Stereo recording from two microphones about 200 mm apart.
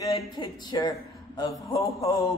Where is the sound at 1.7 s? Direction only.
15° left (ahead or behind).